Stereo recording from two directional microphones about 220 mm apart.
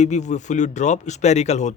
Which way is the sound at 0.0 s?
30° left (ahead or behind).